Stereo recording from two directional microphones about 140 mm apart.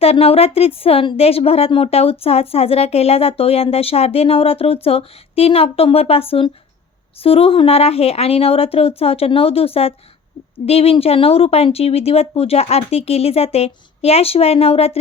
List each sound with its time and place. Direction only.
0.0 s speech: 45° left (ahead or behind)